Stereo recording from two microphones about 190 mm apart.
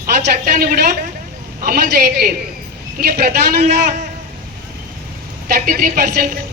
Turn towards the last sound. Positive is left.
turn(degrees=-50)  # may be behind; listen again after turning